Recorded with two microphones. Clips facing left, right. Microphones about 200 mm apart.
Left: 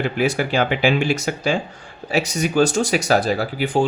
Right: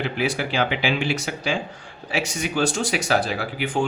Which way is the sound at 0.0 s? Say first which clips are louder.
Left 4 dB; 45° left (ahead or behind).